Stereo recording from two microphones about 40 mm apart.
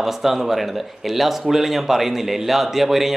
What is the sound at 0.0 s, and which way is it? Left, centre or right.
Speech, centre.